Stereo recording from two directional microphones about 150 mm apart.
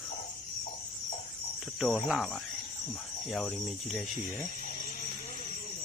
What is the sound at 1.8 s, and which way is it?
Cricket, 5° right (ahead or behind).